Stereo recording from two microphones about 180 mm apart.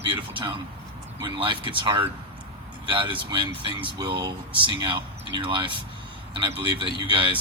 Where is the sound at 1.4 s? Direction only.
25° right (ahead or behind).